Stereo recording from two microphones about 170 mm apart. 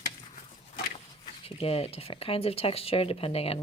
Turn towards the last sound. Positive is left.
turn(degrees=35)  # may be behind; listen again after turning